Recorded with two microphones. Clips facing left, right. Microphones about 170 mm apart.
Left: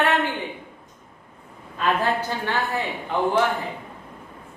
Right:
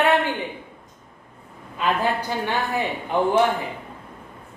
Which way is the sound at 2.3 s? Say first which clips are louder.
Right 1 dB; 15° right (ahead or behind).